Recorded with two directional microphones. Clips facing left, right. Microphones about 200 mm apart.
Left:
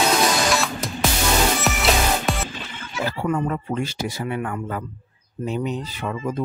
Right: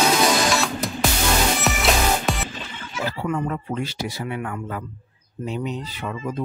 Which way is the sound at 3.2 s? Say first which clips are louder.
Left 3 dB; 45° left (ahead or behind).